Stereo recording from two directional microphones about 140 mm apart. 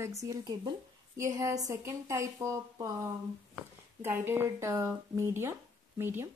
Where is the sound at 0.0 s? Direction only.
25° right (ahead or behind).